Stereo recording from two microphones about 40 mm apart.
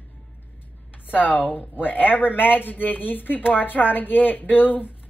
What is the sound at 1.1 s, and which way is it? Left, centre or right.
Speech, left.